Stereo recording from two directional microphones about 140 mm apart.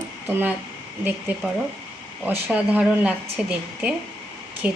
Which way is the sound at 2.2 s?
10° right (ahead or behind).